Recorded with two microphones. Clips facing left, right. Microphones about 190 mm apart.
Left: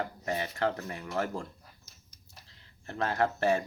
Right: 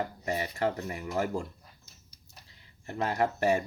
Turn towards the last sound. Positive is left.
turn(degrees=-15)  # may be behind; listen again after turning